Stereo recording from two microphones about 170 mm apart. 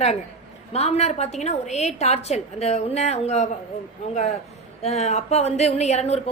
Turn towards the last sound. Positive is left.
turn(degrees=40)  # may be behind; listen again after turning